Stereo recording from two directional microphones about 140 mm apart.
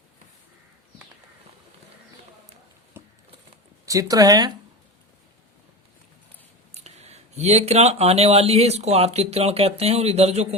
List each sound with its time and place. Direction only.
3.0 s a sound: 15° right (ahead or behind)
3.8 s speech: 25° right (ahead or behind)
6.8 s speech: 50° right (ahead or behind)